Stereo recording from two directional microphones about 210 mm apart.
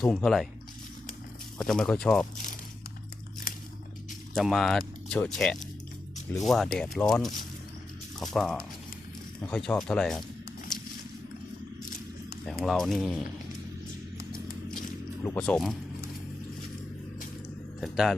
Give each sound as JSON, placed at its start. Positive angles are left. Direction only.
{"t": 0.0, "sound": "speech", "side_deg": 0}
{"t": 1.5, "sound": "speech", "side_deg": 0}
{"t": 4.4, "sound": "speech", "side_deg": 0}
{"t": 12.5, "sound": "speech", "side_deg": 0}
{"t": 14.4, "sound": "vehicle", "side_deg": 40}
{"t": 15.2, "sound": "speech", "side_deg": 5}
{"t": 17.7, "sound": "speech", "side_deg": 0}